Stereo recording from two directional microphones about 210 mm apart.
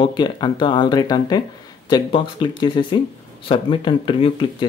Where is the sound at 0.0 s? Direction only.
20° left (ahead or behind).